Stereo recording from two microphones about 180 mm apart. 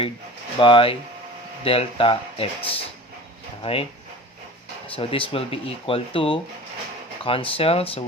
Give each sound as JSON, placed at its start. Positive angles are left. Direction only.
{"t": 0.6, "sound": "speech", "side_deg": 30}
{"t": 4.9, "sound": "speech", "side_deg": 30}